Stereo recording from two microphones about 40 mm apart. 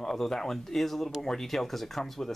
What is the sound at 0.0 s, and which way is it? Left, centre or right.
Speech, centre.